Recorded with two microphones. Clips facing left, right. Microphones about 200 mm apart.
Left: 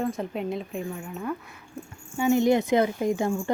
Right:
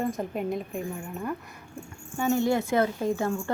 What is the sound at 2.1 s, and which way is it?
Speech, 10° left (ahead or behind).